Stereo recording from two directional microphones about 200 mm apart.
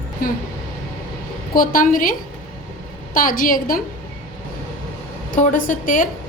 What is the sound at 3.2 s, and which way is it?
Speech, 45° left (ahead or behind).